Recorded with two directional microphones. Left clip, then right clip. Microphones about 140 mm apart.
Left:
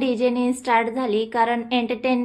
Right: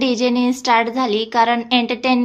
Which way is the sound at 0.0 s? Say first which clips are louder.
Right 3 dB; 30° right (ahead or behind).